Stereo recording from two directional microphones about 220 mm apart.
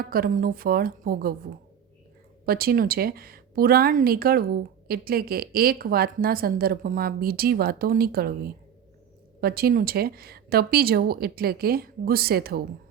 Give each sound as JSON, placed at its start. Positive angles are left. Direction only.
{"t": 0.0, "sound": "a woman's voice", "side_deg": -40}
{"t": 9.4, "sound": "a woman's voice", "side_deg": -45}